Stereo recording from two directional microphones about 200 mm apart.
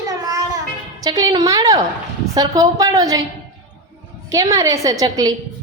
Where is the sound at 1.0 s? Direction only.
20° right (ahead or behind).